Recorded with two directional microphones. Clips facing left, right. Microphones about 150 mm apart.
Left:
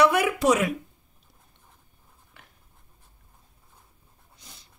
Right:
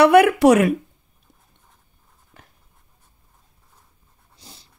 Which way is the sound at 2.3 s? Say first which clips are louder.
Right 5 dB; 40° right (ahead or behind).